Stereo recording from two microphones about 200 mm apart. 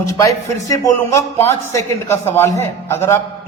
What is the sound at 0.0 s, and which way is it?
A man's voice, 15° left (ahead or behind).